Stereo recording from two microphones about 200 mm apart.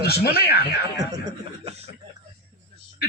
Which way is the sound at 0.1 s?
50° left (ahead or behind).